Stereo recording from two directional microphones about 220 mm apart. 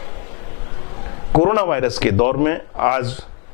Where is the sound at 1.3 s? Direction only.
20° left (ahead or behind).